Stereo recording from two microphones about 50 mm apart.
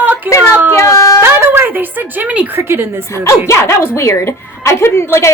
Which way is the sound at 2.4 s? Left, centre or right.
Right.